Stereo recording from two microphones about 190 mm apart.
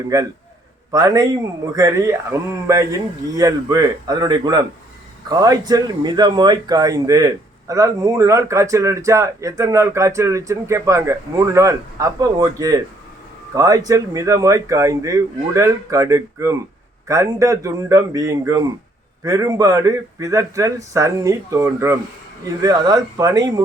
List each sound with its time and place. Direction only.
0.1 s a man's voice: 20° right (ahead or behind)